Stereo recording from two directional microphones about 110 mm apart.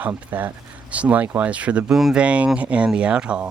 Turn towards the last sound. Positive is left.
turn(degrees=-10)  # may be behind; listen again after turning